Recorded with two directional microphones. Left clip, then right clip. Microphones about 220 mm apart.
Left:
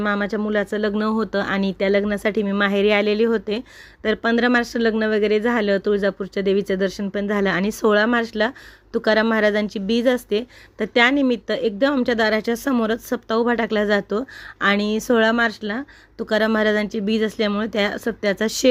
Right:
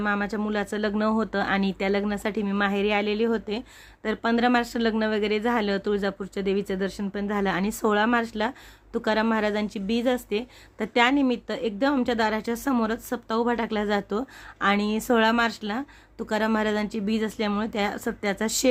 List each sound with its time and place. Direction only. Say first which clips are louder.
0.0 s speech: left 5 dB; 15° left (ahead or behind)